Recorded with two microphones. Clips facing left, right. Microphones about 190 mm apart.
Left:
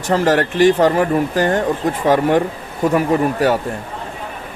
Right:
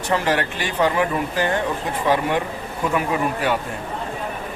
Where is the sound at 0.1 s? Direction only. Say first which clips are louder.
Left 6 dB; 45° left (ahead or behind).